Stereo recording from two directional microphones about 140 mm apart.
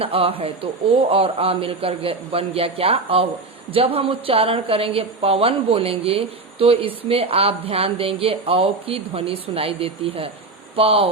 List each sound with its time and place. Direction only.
0.0 s a woman's voice: 45° right (ahead or behind)